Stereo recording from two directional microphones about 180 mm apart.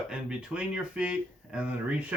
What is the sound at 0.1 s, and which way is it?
Speech, 5° right (ahead or behind).